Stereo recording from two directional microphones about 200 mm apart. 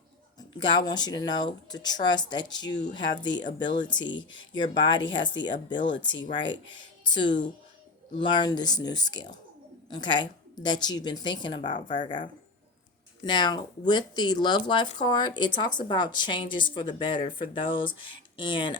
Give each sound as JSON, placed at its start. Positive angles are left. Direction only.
{"t": 0.3, "sound": "speech", "side_deg": 20}
{"t": 13.2, "sound": "speech", "side_deg": 20}